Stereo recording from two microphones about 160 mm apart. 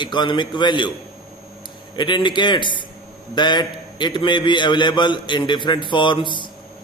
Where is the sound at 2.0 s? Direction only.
30° left (ahead or behind).